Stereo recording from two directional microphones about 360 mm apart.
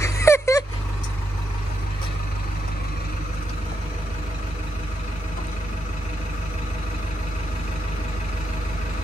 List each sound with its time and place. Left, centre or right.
0.0 s vehicle: centre